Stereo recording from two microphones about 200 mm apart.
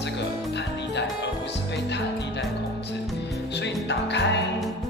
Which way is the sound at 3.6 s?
60° left (ahead or behind).